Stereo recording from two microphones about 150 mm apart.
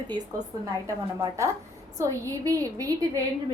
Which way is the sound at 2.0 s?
20° right (ahead or behind).